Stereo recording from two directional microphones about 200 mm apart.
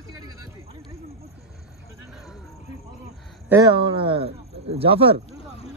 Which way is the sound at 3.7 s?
25° right (ahead or behind).